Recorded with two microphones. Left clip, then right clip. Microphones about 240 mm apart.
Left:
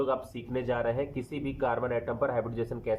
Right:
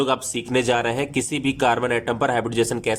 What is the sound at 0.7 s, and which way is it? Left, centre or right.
Speech, right.